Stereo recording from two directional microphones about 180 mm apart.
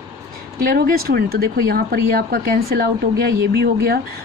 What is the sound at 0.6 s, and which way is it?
Speech, 55° right (ahead or behind).